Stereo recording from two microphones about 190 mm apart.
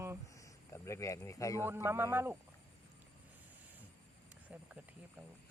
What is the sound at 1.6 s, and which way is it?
Speech, 10° right (ahead or behind).